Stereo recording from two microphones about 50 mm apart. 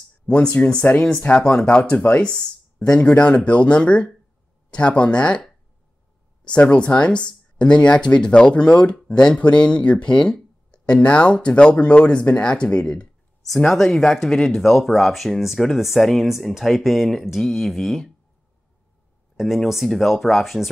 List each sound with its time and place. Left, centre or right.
0.3 s speech: left
1.4 s speech: centre
6.4 s speech: left
13.7 s speech: centre
19.3 s speech: centre